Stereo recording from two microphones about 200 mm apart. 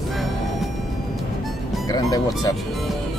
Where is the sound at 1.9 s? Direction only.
20° left (ahead or behind).